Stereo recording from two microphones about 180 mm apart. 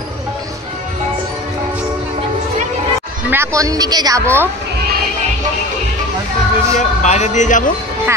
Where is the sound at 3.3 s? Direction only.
15° right (ahead or behind).